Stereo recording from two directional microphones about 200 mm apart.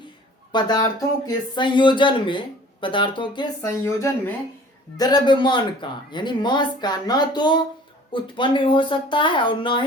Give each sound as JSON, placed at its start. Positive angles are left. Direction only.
{"t": 0.5, "sound": "speech", "side_deg": 20}